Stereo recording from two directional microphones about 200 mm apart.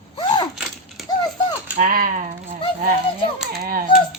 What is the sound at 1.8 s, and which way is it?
Speech, 45° right (ahead or behind).